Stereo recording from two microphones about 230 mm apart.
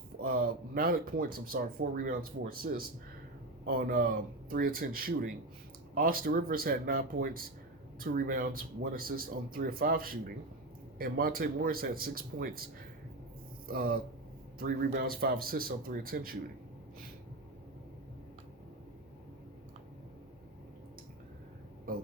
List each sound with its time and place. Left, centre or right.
0.2 s speech: right
13.7 s speech: right